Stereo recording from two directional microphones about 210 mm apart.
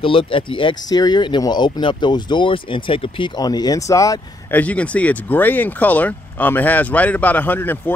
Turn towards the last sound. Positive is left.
turn(degrees=10)  # may be behind; listen again after turning